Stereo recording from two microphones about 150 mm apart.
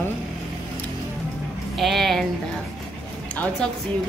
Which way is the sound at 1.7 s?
Centre (ahead or behind).